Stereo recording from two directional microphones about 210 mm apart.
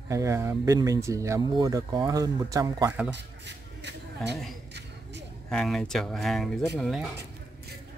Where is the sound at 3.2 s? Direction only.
55° right (ahead or behind).